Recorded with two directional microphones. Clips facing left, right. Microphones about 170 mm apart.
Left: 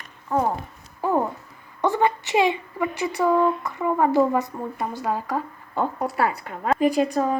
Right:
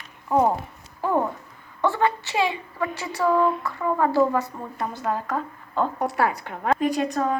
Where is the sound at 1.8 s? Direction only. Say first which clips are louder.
Left 1 dB; 15° left (ahead or behind).